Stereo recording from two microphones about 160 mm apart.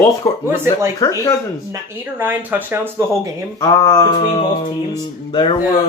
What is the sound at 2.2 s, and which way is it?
Speech, 10° right (ahead or behind).